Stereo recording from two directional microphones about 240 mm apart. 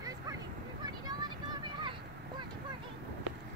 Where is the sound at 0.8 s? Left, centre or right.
Centre.